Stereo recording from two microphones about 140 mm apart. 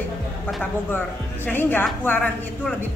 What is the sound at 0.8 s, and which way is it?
Speech, 15° left (ahead or behind).